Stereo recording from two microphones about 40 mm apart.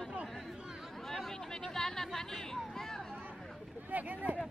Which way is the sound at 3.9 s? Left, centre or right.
Right.